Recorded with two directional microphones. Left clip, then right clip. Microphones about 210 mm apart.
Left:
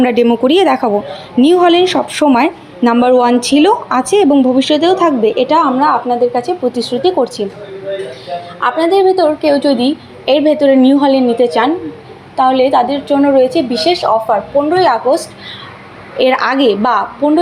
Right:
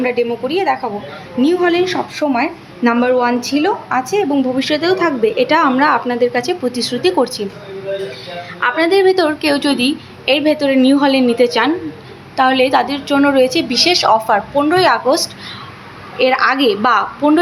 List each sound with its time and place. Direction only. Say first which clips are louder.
0.0 s a woman's voice: left 6 dB; 25° left (ahead or behind)
2.8 s a woman's voice: left 4 dB; 15° left (ahead or behind)
4.3 s speech: left 6 dB; 10° left (ahead or behind)
7.4 s speech: left 4 dB; 10° left (ahead or behind)
8.6 s a woman's voice: left 2 dB; centre (ahead or behind)
16.2 s speech: left 2 dB; 15° left (ahead or behind)